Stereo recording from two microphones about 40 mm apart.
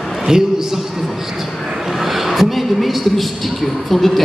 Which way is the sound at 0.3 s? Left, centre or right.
Centre.